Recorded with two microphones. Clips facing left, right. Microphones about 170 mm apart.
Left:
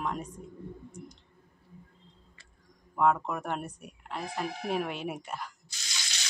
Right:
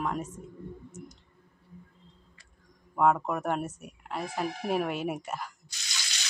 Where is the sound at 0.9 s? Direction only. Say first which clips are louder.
Even; 5° right (ahead or behind).